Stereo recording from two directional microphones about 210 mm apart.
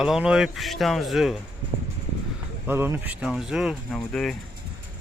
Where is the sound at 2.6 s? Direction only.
10° right (ahead or behind).